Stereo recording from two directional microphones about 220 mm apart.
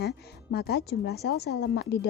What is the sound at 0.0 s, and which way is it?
A woman's voice, 45° left (ahead or behind).